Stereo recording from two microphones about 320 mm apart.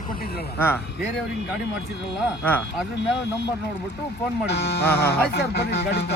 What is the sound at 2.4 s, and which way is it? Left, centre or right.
Speech, centre.